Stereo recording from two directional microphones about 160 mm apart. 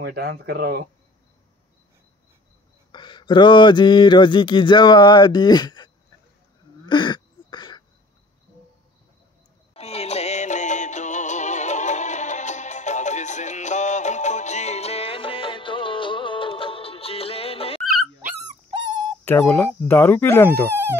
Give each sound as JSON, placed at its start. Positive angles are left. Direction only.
{"t": 0.0, "sound": "speech", "side_deg": -75}
{"t": 2.9, "sound": "speech", "side_deg": 30}
{"t": 6.9, "sound": "a sound", "side_deg": 30}
{"t": 9.8, "sound": "music", "side_deg": 40}
{"t": 19.2, "sound": "speech", "side_deg": 10}